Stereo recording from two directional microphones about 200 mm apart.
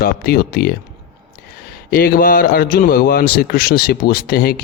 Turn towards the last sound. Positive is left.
turn(degrees=50)  # may be behind; listen again after turning